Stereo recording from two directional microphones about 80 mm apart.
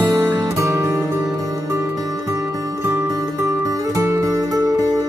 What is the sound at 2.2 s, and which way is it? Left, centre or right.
Music, right.